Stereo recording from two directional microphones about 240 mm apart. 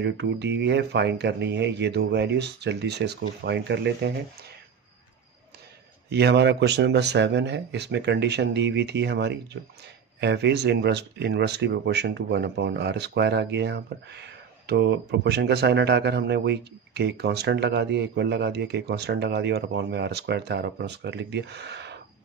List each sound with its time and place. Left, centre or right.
0.0 s speech: right
6.0 s speech: right